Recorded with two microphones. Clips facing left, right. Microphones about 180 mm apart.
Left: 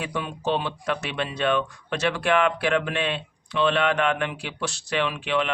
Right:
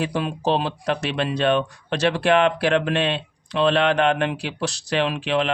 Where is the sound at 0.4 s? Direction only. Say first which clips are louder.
Right 3 dB; 35° right (ahead or behind).